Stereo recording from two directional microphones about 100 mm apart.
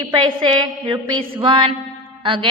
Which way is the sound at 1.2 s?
60° right (ahead or behind).